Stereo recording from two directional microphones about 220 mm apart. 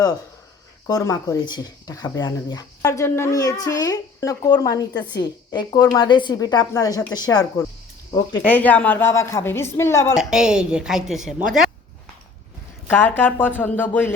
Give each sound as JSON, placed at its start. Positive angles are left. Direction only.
{"t": 0.9, "sound": "a woman's voice", "side_deg": 15}
{"t": 10.2, "sound": "a woman's voice", "side_deg": -5}
{"t": 12.9, "sound": "speech", "side_deg": 10}